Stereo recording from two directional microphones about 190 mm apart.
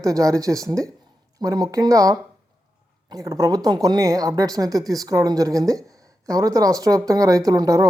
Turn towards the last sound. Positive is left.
turn(degrees=-20)  # may be behind; listen again after turning